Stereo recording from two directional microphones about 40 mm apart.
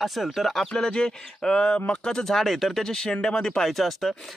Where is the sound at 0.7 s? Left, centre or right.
Centre.